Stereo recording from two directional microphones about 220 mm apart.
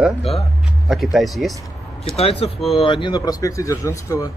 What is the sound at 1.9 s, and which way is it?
Speech, 25° left (ahead or behind).